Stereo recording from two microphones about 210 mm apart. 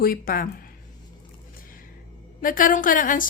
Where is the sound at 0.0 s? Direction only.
45° left (ahead or behind).